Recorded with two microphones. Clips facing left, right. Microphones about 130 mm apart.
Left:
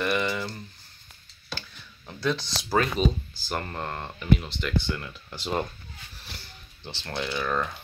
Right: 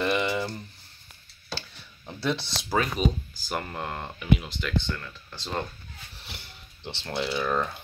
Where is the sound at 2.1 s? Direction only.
30° right (ahead or behind).